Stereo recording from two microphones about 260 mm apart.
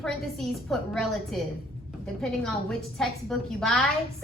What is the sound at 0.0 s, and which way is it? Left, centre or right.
A woman's voice, centre.